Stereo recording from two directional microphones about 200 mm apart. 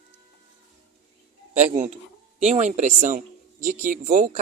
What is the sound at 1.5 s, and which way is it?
Speech, 35° right (ahead or behind).